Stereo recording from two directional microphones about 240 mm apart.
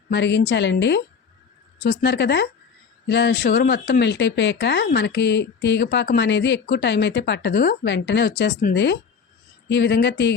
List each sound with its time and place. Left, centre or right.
0.1 s speech: left